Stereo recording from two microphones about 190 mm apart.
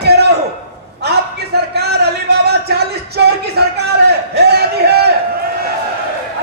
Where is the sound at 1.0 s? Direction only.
60° right (ahead or behind).